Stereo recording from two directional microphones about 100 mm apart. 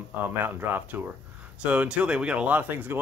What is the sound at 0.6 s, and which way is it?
Speech, 20° right (ahead or behind).